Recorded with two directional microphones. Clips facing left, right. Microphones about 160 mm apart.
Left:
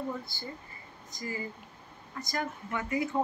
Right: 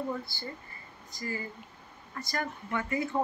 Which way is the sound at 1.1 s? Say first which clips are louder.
Even; 15° left (ahead or behind).